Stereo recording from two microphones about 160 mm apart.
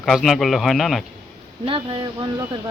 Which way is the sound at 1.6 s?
30° right (ahead or behind).